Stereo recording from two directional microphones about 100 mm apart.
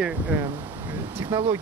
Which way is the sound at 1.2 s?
35° right (ahead or behind).